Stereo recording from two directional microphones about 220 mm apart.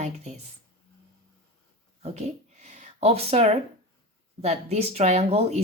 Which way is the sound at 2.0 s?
30° right (ahead or behind).